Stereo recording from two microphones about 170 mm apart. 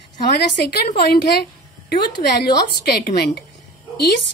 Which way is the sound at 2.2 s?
50° left (ahead or behind).